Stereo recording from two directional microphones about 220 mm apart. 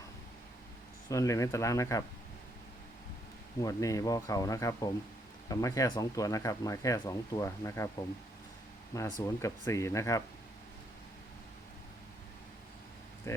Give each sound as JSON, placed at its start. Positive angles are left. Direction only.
{"t": 1.1, "sound": "speech", "side_deg": 15}
{"t": 3.6, "sound": "speech", "side_deg": 15}
{"t": 9.2, "sound": "speech", "side_deg": 15}
{"t": 13.3, "sound": "speech", "side_deg": 15}